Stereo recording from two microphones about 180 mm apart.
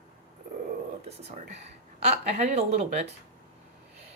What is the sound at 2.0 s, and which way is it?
Speech, 40° right (ahead or behind).